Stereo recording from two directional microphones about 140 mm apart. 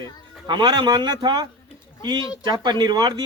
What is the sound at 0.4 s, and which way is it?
A man's voice, 35° right (ahead or behind).